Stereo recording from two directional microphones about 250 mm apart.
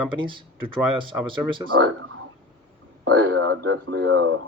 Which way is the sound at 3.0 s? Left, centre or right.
Right.